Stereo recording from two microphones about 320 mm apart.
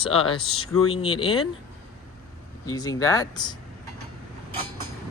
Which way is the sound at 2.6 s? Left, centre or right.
Centre.